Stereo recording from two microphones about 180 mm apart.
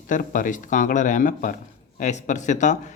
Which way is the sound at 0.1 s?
45° left (ahead or behind).